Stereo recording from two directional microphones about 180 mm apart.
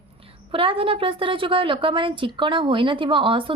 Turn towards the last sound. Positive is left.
turn(degrees=-30)  # may be behind; listen again after turning